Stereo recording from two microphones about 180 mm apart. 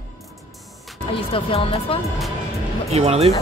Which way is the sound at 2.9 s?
35° right (ahead or behind).